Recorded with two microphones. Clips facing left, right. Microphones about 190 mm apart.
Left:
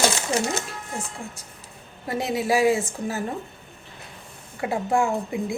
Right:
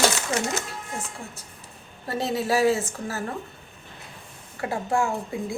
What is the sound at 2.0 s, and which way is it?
A woman's voice, 15° left (ahead or behind).